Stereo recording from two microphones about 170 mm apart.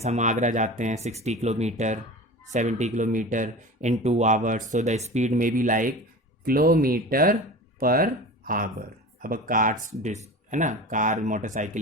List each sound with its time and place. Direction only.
0.0 s speech: 40° right (ahead or behind)